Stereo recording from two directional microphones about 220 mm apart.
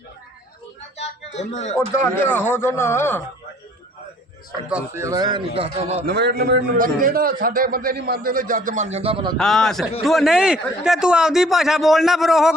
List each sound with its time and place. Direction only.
1.4 s speech: 30° left (ahead or behind)
2.2 s speech: 10° left (ahead or behind)
4.7 s a man's voice: 15° right (ahead or behind)
6.1 s a man's voice: 45° right (ahead or behind); by 9.3 s 25° right (ahead or behind)
9.4 s a man's voice: centre (ahead or behind)